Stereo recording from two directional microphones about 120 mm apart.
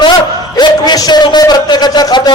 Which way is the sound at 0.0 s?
40° left (ahead or behind).